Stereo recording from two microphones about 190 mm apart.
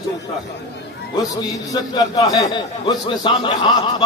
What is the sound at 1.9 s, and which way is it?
Speech, 20° left (ahead or behind).